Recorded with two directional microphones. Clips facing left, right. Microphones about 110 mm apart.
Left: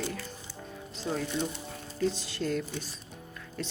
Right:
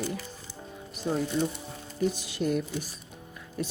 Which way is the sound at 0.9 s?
15° right (ahead or behind).